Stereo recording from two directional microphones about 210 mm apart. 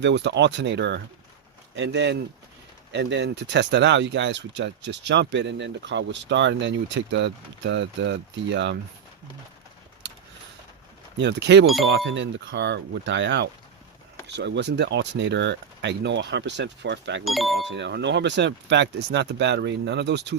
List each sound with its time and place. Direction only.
0.0 s speech: 55° right (ahead or behind)
11.2 s speech: 55° right (ahead or behind)
17.2 s speech: centre (ahead or behind)
17.6 s speech: 55° right (ahead or behind)